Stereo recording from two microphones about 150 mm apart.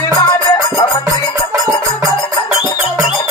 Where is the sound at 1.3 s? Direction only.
20° right (ahead or behind).